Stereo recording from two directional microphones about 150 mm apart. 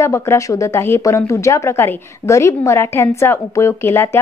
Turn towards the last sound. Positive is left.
turn(degrees=15)  # may be behind; listen again after turning